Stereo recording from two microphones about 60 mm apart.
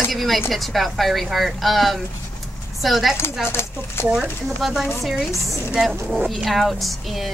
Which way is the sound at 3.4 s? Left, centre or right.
Left.